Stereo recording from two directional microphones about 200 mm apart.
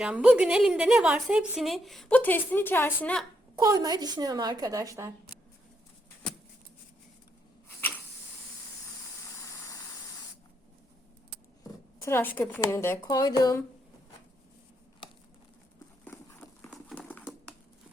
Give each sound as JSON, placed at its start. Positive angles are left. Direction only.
{"t": 0.0, "sound": "a woman's voice", "side_deg": -5}
{"t": 3.6, "sound": "a woman's voice", "side_deg": -15}
{"t": 12.0, "sound": "a woman's voice", "side_deg": 10}
{"t": 16.1, "sound": "horse", "side_deg": 10}
{"t": 16.6, "sound": "clip-clop", "side_deg": 10}